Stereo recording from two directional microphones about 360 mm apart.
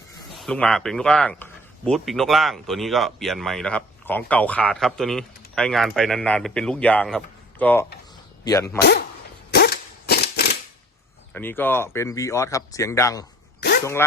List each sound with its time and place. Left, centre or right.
0.3 s a man's voice: centre
8.8 s speech: left
9.5 s a sound: left
11.3 s speech: centre